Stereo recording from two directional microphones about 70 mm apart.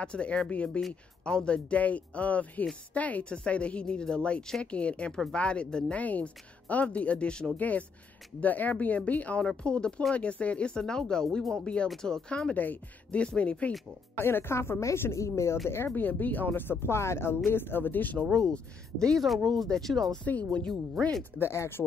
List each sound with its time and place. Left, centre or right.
0.0 s a woman's voice: centre
14.1 s speech: left
15.7 s speech: left
16.8 s speech: left
18.3 s speech: centre
21.2 s speech: left